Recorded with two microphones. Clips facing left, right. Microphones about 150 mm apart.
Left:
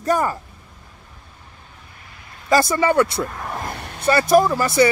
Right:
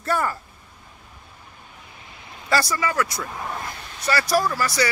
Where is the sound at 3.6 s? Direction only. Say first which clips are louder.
Left 5 dB; 60° left (ahead or behind).